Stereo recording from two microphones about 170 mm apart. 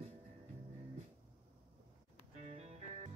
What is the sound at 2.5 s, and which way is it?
Music, 40° right (ahead or behind).